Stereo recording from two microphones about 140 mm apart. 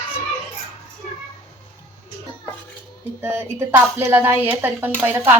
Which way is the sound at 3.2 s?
15° right (ahead or behind).